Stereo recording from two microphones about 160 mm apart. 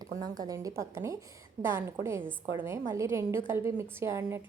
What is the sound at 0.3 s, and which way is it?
A woman's voice, 20° right (ahead or behind).